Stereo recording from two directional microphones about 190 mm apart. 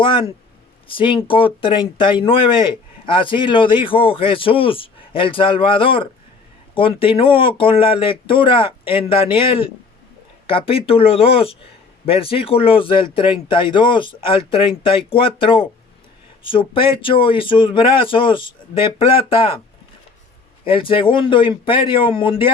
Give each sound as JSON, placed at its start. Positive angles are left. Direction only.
{"t": 0.0, "sound": "speech", "side_deg": 25}
{"t": 20.7, "sound": "speech", "side_deg": 30}